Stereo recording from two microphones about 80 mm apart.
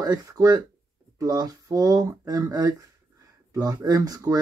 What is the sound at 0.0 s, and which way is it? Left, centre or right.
Speech, right.